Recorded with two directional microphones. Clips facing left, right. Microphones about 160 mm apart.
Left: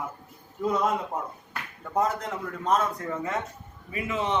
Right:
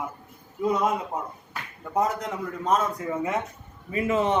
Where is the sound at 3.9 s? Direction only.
35° right (ahead or behind).